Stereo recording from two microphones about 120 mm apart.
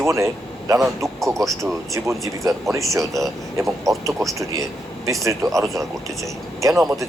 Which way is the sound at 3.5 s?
25° right (ahead or behind).